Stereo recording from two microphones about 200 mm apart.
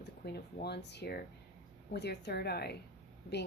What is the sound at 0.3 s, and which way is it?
Speech, 55° left (ahead or behind).